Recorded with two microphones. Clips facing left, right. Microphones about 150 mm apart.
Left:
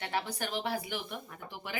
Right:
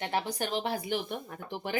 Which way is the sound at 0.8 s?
35° right (ahead or behind).